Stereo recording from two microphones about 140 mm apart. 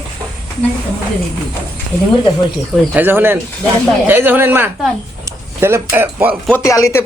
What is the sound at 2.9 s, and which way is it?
Speech, 15° right (ahead or behind).